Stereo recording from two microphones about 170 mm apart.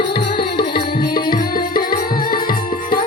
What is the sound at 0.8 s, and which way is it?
Music, 65° left (ahead or behind).